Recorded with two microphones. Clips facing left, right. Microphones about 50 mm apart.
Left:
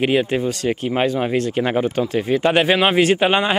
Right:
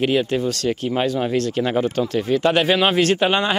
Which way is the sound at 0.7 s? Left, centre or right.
Left.